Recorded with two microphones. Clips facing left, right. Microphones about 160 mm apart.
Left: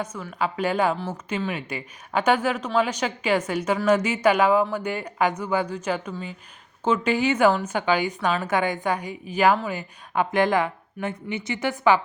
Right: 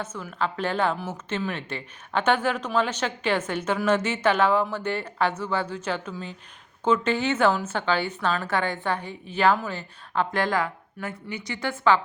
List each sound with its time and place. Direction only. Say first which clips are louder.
0.0 s a woman's voice: left 2 dB; 10° left (ahead or behind)